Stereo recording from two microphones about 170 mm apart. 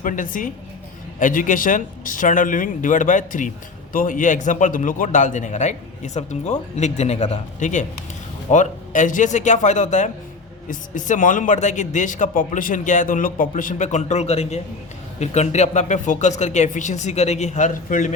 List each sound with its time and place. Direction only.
0.0 s a man's voice: 50° left (ahead or behind)